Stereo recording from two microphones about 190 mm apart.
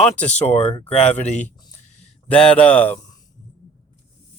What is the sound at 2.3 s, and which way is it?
Speech, 5° left (ahead or behind).